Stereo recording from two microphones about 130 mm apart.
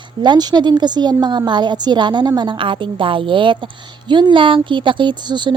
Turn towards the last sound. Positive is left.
turn(degrees=-35)  # may be behind; listen again after turning